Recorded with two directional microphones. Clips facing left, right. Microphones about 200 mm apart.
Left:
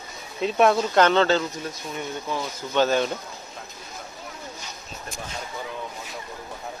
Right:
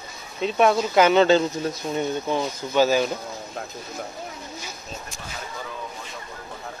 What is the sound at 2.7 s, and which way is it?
Speech, 5° right (ahead or behind).